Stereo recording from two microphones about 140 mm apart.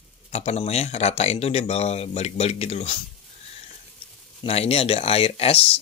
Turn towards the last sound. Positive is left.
turn(degrees=45)  # may be behind; listen again after turning